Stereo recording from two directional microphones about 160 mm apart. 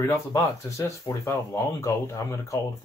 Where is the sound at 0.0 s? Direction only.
20° left (ahead or behind).